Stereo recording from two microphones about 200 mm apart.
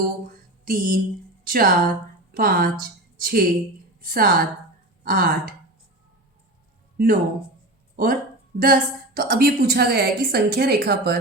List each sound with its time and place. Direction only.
0.6 s a sound: 45° right (ahead or behind)
1.5 s a woman's voice: 45° right (ahead or behind)
6.9 s a woman's voice: 50° right (ahead or behind)